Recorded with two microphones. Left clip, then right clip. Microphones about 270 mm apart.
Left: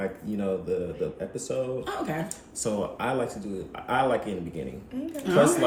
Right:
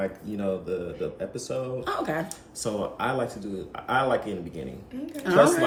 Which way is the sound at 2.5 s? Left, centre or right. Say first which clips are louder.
Even; centre.